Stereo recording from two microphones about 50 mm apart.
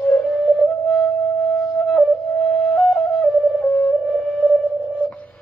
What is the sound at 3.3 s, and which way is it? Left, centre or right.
Music, left.